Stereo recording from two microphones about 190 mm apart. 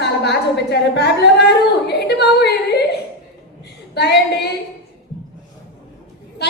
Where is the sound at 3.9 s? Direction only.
60° left (ahead or behind).